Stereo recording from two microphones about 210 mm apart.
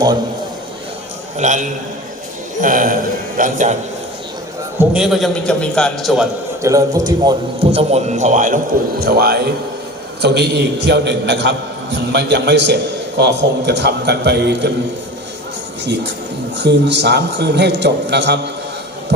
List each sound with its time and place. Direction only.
1.4 s a man's voice: 35° right (ahead or behind)
4.8 s a man's voice: 5° right (ahead or behind)
6.6 s a man's voice: 15° right (ahead or behind); by 14.7 s 55° right (ahead or behind)
16.6 s a man's voice: 55° right (ahead or behind)